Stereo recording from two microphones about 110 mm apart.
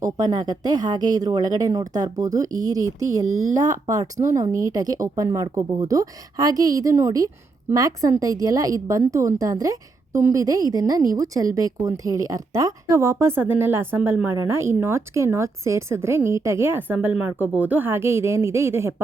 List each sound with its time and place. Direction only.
0.0 s a woman's voice: 35° right (ahead or behind)